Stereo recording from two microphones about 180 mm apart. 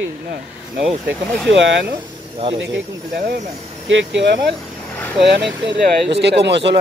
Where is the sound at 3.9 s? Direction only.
80° right.